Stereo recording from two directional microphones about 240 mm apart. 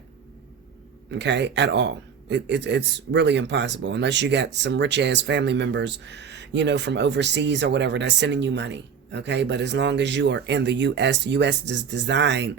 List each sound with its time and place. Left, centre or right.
1.1 s speech: right